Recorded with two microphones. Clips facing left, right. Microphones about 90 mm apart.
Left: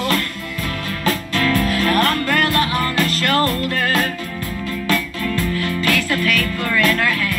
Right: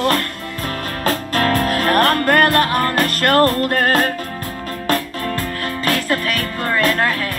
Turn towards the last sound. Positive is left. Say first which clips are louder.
# right 1 dB
turn(degrees=-35)  # may be behind; listen again after turning